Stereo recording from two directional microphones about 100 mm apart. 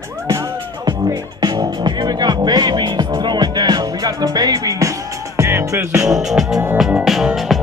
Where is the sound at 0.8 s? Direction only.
45° right (ahead or behind); by 6.0 s 30° right (ahead or behind).